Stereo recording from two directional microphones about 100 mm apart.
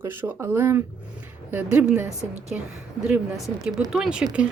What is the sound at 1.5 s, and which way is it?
Speech, 15° right (ahead or behind).